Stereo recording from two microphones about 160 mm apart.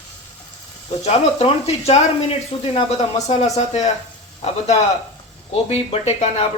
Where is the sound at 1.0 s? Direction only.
40° left (ahead or behind).